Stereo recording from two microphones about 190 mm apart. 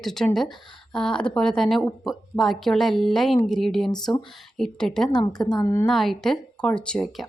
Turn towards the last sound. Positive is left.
turn(degrees=0)  # may be behind; listen again after turning